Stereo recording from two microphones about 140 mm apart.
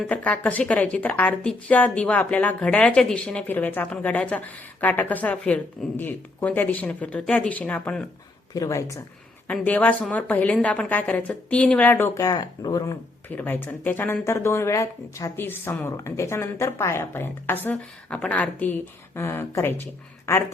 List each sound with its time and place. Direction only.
0.1 s a woman's voice: 10° left (ahead or behind)
8.5 s speech: 25° left (ahead or behind)
9.5 s a woman's voice: 10° left (ahead or behind)
12.2 s speech: 30° left (ahead or behind)
13.3 s a woman's voice: 15° left (ahead or behind)